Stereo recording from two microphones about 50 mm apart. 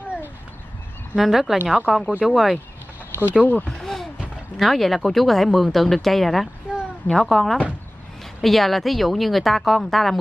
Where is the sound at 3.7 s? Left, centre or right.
Centre.